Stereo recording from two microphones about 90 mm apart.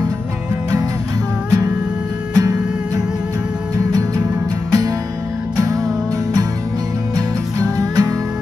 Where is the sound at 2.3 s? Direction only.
45° right (ahead or behind).